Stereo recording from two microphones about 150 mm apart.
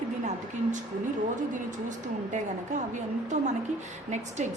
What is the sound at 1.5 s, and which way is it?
Speech, 55° right (ahead or behind).